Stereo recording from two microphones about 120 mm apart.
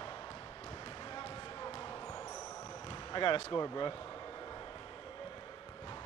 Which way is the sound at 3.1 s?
45° left (ahead or behind).